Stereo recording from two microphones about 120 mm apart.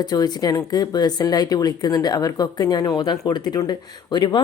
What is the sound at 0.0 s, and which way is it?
Speech, 35° left (ahead or behind).